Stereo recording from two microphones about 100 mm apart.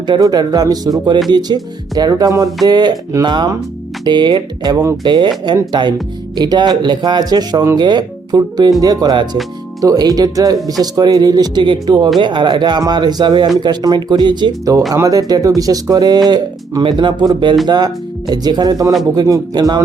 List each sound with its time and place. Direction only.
0.0 s speech: 45° right (ahead or behind)
14.6 s speech: 35° right (ahead or behind)